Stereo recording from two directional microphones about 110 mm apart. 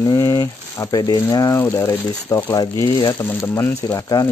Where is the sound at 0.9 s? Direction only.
35° left (ahead or behind).